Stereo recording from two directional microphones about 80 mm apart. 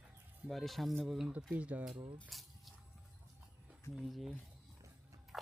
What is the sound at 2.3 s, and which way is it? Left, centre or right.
Speech, centre.